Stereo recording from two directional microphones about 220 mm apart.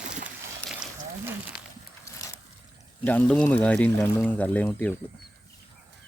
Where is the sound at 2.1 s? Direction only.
15° left (ahead or behind).